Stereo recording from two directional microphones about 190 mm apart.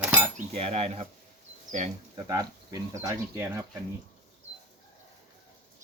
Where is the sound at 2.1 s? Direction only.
20° right (ahead or behind).